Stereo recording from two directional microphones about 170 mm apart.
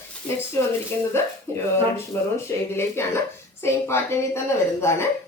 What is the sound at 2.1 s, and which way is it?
Speech, 15° left (ahead or behind).